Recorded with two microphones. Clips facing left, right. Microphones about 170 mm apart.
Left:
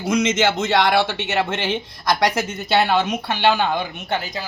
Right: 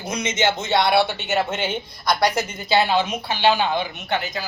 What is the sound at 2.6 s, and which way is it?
Speech, 65° left (ahead or behind).